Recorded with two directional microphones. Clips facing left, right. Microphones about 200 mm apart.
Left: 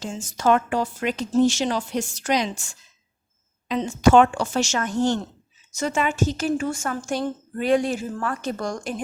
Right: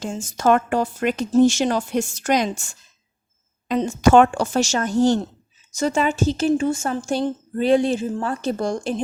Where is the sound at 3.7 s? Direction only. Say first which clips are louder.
Right 2 dB; 45° right (ahead or behind).